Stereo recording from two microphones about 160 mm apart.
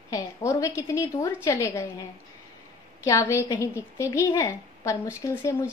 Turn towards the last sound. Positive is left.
turn(degrees=15)  # may be behind; listen again after turning